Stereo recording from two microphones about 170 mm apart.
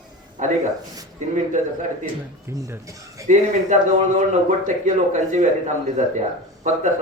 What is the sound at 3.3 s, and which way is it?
Speech, 45° right (ahead or behind).